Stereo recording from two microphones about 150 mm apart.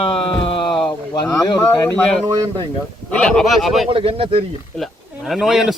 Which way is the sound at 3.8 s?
40° right (ahead or behind).